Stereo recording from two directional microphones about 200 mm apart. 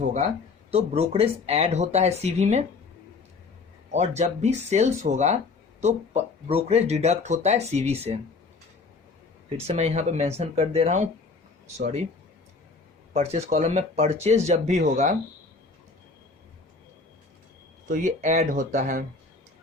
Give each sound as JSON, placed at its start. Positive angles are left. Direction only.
{"t": 0.7, "sound": "speech", "side_deg": -30}
{"t": 3.9, "sound": "speech", "side_deg": -35}
{"t": 9.6, "sound": "speech", "side_deg": -30}
{"t": 13.1, "sound": "speech", "side_deg": -30}
{"t": 17.8, "sound": "speech", "side_deg": -40}